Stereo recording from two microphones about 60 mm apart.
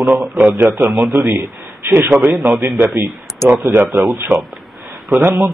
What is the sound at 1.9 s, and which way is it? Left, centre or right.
Speech, right.